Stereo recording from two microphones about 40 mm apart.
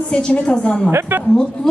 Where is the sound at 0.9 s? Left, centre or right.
Right.